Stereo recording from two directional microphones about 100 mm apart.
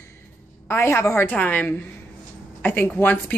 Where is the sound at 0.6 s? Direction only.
25° left (ahead or behind).